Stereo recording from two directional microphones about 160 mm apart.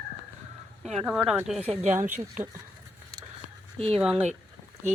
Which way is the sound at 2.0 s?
15° right (ahead or behind).